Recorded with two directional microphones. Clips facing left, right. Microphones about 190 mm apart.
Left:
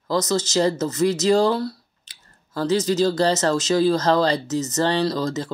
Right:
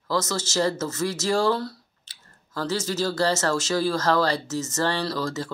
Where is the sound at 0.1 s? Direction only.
20° left (ahead or behind).